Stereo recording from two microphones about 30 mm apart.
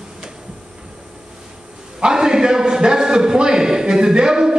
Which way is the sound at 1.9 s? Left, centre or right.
Right.